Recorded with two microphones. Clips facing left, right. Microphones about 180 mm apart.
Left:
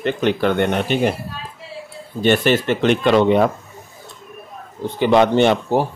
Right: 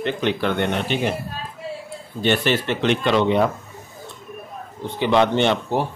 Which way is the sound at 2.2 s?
50° left (ahead or behind).